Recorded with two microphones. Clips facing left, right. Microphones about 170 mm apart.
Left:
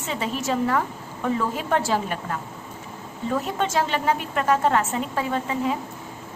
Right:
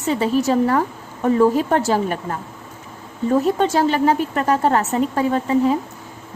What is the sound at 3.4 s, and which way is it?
A woman's voice, 35° right (ahead or behind).